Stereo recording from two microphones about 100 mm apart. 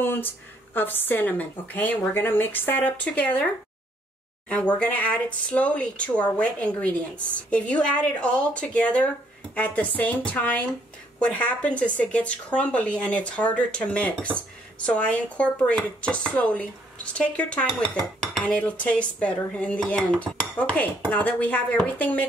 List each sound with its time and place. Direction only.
0.0 s speech: 20° left (ahead or behind)
4.7 s speech: 15° left (ahead or behind)